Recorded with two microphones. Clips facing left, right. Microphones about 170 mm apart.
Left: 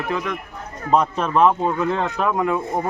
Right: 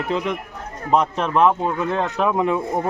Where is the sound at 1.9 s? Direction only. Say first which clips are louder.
Right 1 dB; 15° right (ahead or behind).